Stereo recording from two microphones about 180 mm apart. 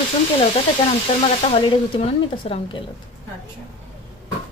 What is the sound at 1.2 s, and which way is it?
Speech, 30° left (ahead or behind).